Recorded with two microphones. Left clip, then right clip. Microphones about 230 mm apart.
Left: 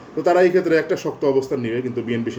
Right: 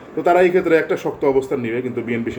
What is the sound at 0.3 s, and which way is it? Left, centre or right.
A man's voice, centre.